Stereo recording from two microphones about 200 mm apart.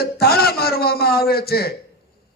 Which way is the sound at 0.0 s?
50° left (ahead or behind).